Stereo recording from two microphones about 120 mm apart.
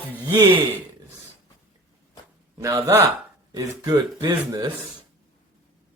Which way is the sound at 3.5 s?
35° right (ahead or behind).